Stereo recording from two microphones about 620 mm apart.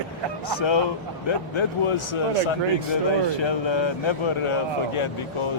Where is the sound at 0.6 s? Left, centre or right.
Left.